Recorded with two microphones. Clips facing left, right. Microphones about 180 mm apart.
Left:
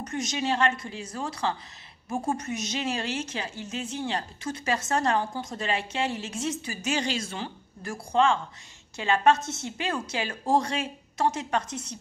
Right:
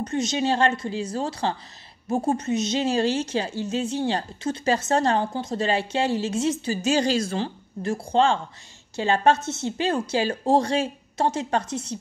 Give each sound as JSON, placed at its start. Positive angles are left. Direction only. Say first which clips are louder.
{"t": 0.0, "sound": "a woman's voice", "louder": "right 6 dB", "side_deg": -30}